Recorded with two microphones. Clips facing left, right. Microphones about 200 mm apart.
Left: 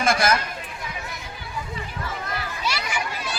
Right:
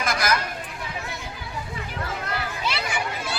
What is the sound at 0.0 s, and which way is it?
Chatter, 30° left (ahead or behind).